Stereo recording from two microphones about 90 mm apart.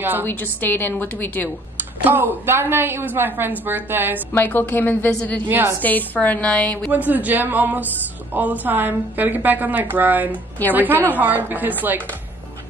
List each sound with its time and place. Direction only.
0.2 s a woman's voice: 20° left (ahead or behind)
2.0 s a woman's voice: 20° right (ahead or behind)
4.3 s a woman's voice: 25° left (ahead or behind)
5.5 s a woman's voice: 25° right (ahead or behind)
5.8 s a woman's voice: 20° left (ahead or behind)
6.9 s a woman's voice: 15° right (ahead or behind)